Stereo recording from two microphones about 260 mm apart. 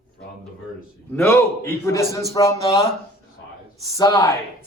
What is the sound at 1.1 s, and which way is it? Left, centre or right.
A man's voice, centre.